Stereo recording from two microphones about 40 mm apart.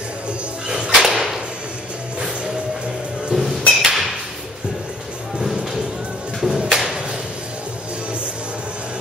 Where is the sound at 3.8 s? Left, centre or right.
Centre.